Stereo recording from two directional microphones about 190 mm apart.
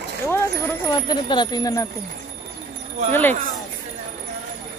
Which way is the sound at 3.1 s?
10° left (ahead or behind).